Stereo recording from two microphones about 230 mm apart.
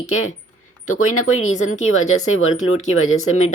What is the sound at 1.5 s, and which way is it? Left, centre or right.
Speech, left.